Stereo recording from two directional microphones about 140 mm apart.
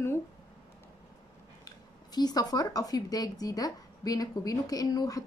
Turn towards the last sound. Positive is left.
turn(degrees=25)  # may be behind; listen again after turning